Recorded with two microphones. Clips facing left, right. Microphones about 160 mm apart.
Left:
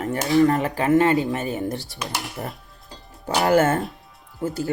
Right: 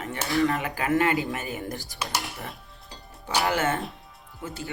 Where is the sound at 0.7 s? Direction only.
25° left (ahead or behind).